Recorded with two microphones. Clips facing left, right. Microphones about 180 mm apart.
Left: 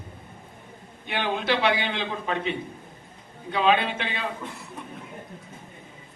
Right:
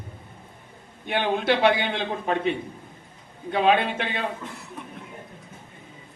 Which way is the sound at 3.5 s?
50° right (ahead or behind).